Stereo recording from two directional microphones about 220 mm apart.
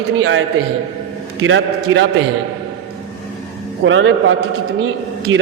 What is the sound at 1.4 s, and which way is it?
Speech, 60° right (ahead or behind).